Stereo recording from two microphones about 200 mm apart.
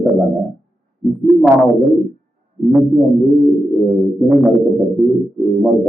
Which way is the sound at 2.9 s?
Centre (ahead or behind).